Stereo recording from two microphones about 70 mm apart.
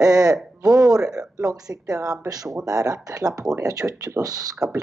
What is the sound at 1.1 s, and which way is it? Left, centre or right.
Speech, centre.